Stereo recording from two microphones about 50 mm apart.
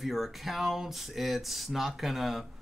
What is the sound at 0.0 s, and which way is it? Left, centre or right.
Speech, centre.